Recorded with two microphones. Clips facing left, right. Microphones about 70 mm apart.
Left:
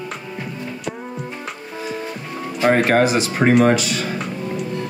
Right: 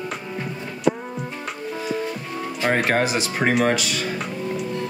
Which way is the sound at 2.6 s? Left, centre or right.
Left.